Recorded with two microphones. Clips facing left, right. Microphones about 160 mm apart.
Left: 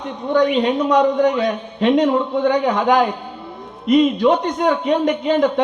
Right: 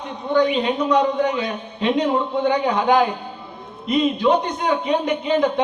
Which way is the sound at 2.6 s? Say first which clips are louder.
Left 2 dB; 40° left (ahead or behind).